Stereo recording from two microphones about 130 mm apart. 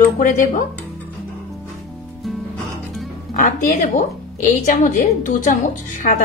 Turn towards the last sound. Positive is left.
turn(degrees=80)